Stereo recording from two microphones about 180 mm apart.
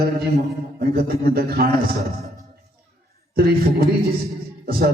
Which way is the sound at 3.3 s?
55° right (ahead or behind).